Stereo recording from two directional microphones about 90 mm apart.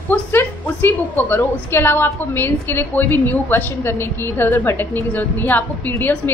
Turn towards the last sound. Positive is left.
turn(degrees=20)  # may be behind; listen again after turning